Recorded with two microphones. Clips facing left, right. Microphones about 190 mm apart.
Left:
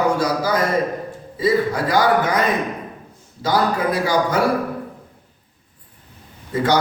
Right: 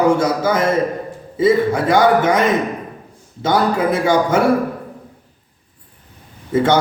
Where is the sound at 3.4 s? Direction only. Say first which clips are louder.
Right 3 dB; 25° right (ahead or behind).